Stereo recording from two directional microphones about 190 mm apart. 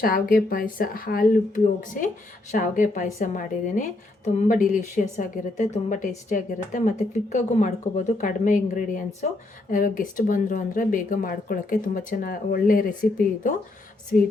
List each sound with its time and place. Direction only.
0.0 s a woman's voice: 50° left (ahead or behind)